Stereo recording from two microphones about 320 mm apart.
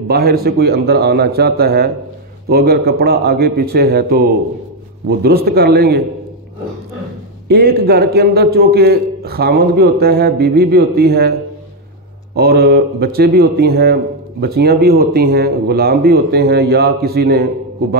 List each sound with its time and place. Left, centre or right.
0.1 s a man's voice: right
7.4 s a man's voice: right
12.4 s a man's voice: right